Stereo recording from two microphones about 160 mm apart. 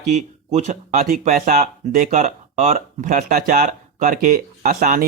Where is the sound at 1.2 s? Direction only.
60° right (ahead or behind).